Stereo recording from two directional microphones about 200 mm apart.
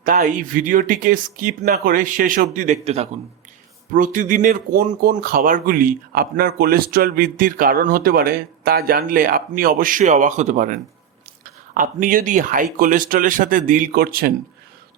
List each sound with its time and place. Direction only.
0.0 s speech: 45° right (ahead or behind)